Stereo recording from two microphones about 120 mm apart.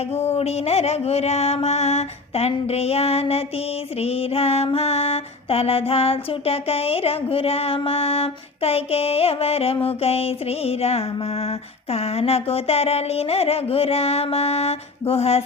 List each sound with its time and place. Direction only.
0.1 s mantra: 60° left (ahead or behind)